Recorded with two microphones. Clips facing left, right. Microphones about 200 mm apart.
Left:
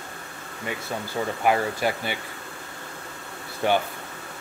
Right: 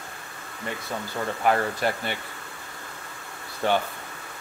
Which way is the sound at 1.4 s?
5° left (ahead or behind).